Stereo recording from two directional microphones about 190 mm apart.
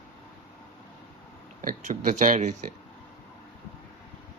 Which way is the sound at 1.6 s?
45° right (ahead or behind).